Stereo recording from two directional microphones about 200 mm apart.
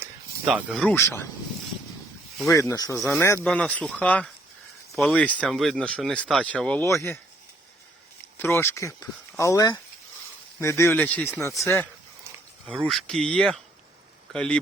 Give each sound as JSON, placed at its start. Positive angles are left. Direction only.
{"t": 0.0, "sound": "snake", "side_deg": -5}
{"t": 0.9, "sound": "speech", "side_deg": 15}
{"t": 2.5, "sound": "speech", "side_deg": 15}
{"t": 8.4, "sound": "speech", "side_deg": 10}
{"t": 12.6, "sound": "speech", "side_deg": 0}